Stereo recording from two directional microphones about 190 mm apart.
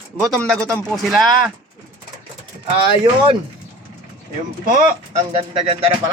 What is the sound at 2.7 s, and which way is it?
Speech, 25° right (ahead or behind).